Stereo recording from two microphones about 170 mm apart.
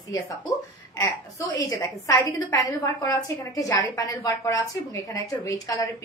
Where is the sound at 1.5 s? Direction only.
20° left (ahead or behind).